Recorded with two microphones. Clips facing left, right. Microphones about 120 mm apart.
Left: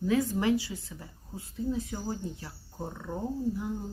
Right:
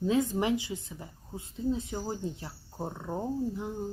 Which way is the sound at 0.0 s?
20° right (ahead or behind).